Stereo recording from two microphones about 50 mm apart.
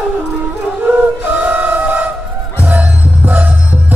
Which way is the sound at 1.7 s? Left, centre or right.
Right.